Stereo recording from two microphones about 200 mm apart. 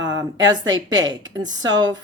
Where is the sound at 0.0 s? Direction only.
65° right (ahead or behind).